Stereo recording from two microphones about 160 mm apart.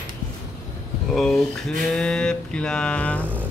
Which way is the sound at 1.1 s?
Centre (ahead or behind).